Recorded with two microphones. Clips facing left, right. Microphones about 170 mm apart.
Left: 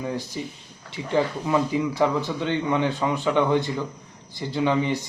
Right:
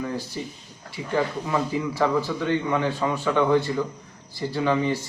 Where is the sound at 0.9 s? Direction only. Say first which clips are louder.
Left 2 dB; 25° left (ahead or behind).